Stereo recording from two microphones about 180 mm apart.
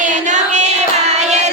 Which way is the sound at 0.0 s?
40° right (ahead or behind).